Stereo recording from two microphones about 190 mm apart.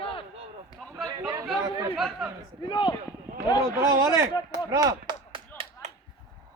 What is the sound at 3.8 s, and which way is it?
Speech, 15° right (ahead or behind).